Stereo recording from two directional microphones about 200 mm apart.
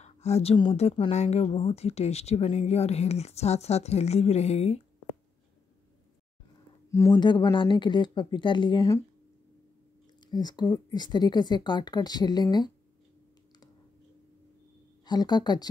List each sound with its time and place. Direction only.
0.0 s speech: 30° left (ahead or behind)
6.9 s speech: 15° left (ahead or behind)
10.2 s speech: 20° left (ahead or behind)
15.0 s speech: 20° left (ahead or behind)